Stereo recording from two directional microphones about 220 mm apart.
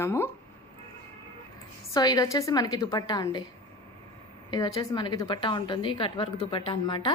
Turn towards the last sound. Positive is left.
turn(degrees=20)  # may be behind; listen again after turning